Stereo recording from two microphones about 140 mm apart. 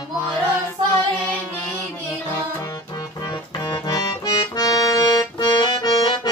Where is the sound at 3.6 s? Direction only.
25° left (ahead or behind).